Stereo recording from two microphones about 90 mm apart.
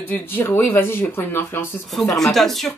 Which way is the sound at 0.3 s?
25° left (ahead or behind).